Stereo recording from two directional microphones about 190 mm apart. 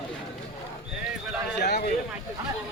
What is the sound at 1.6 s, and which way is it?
Speech, 55° left (ahead or behind).